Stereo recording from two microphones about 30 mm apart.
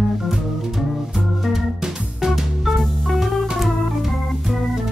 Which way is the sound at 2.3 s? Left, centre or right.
Centre.